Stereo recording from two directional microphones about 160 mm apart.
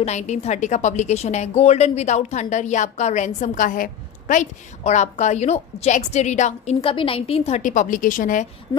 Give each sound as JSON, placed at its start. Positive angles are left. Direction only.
{"t": 0.0, "sound": "a woman's voice", "side_deg": 45}